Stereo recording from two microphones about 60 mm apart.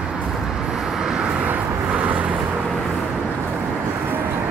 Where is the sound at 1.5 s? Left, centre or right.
Right.